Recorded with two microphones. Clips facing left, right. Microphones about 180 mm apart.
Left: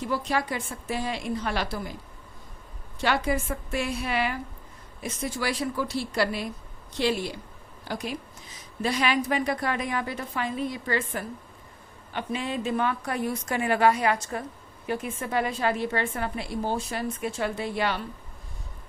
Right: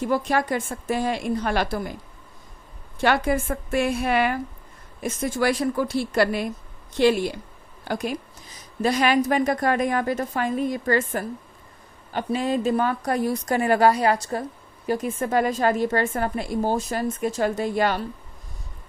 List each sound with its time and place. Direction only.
0.0 s a woman's voice: 50° right (ahead or behind)
3.0 s a woman's voice: 55° right (ahead or behind)